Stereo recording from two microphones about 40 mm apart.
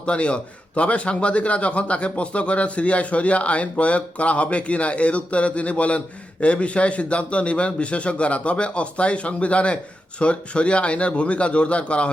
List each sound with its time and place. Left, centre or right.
0.0 s a man's voice: left